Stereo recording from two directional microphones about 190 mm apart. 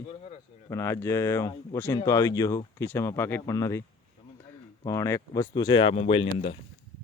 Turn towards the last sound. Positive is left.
turn(degrees=30)  # may be behind; listen again after turning